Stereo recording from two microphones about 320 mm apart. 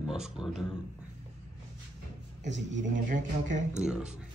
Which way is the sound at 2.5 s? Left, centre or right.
Right.